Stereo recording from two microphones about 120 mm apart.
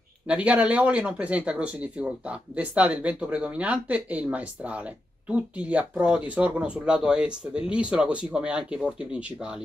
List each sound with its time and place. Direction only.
0.3 s speech: 10° right (ahead or behind)